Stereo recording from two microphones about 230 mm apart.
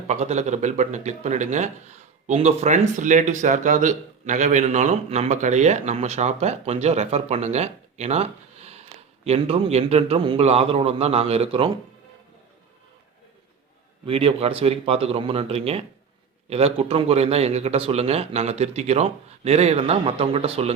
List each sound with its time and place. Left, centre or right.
0.1 s speech: right
14.0 s speech: right